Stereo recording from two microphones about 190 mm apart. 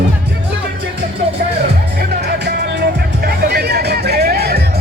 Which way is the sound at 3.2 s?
55° right (ahead or behind).